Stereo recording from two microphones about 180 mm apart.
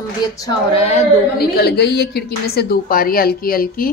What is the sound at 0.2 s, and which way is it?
Speech, 20° left (ahead or behind).